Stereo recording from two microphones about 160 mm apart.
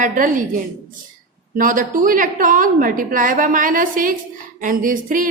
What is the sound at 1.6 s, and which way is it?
A woman's voice, 55° right (ahead or behind).